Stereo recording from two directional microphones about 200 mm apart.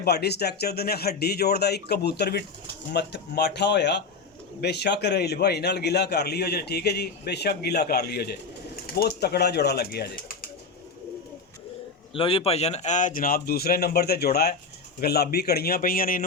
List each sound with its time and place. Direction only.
0.0 s a man's voice: 55° left (ahead or behind)
12.1 s speech: 30° left (ahead or behind); by 16.2 s 45° left (ahead or behind)